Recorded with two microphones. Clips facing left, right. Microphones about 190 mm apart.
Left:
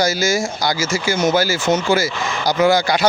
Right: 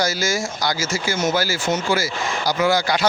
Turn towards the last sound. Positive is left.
turn(degrees=15)  # may be behind; listen again after turning